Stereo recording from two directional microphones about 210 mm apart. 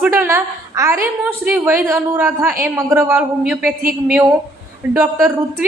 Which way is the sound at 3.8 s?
40° right (ahead or behind).